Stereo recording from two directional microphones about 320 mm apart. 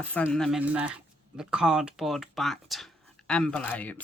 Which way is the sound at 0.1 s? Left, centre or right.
Centre.